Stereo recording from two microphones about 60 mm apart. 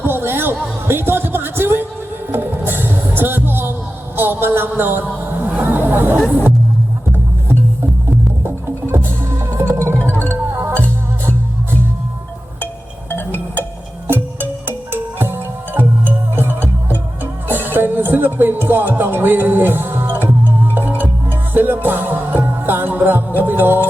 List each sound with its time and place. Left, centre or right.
0.0 s music: right
5.4 s vehicle: right
8.4 s music: right
10.0 s music: left
13.1 s music: left
15.2 s music: right
17.7 s music: right